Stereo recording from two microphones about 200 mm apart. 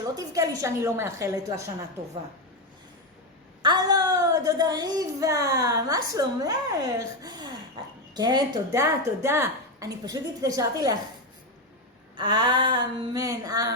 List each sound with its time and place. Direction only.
0.0 s a woman's voice: 15° right (ahead or behind)
3.6 s a woman's voice: 20° right (ahead or behind)
12.1 s a sound: 25° right (ahead or behind)